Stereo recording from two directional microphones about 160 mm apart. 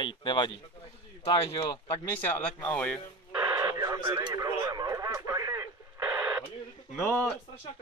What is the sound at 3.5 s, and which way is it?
Radio, 25° right (ahead or behind).